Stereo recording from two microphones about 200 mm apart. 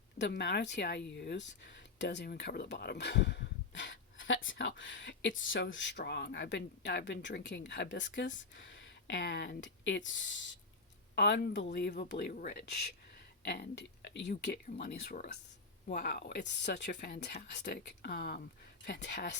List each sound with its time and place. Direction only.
0.2 s speech: 60° left (ahead or behind)